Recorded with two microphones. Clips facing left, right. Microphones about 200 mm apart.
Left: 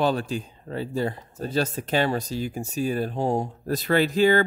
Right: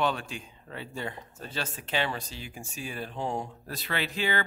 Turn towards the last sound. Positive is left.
turn(degrees=40)  # may be behind; listen again after turning